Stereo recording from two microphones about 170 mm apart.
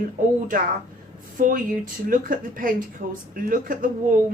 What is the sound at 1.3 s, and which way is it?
A woman's voice, 55° right (ahead or behind).